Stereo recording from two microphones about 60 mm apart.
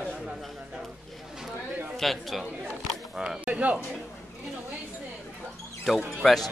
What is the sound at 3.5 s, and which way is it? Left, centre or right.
Speech, right.